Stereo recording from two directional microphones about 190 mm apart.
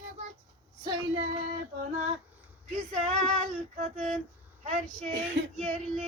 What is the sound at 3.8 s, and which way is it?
Female singing, 40° right (ahead or behind).